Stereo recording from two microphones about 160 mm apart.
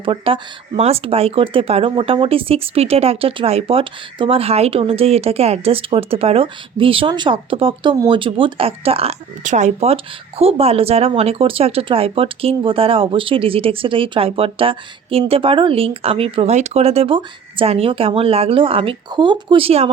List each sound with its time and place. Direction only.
0.0 s speech: 35° right (ahead or behind)
9.4 s speech: 50° right (ahead or behind)